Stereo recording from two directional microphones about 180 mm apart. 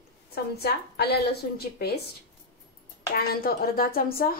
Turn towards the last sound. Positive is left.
turn(degrees=55)  # may be behind; listen again after turning